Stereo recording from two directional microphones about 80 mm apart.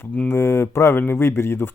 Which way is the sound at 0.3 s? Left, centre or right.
Left.